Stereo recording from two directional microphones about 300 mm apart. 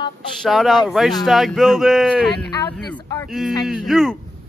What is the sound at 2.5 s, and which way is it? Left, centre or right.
Speech, centre.